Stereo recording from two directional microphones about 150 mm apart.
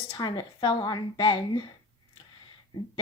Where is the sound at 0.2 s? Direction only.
30° left (ahead or behind).